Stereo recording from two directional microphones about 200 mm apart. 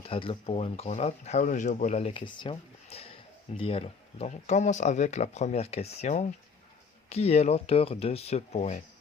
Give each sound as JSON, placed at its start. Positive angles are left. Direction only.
{"t": 0.0, "sound": "speech", "side_deg": 25}